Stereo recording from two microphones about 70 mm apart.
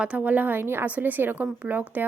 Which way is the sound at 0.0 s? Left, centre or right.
Centre.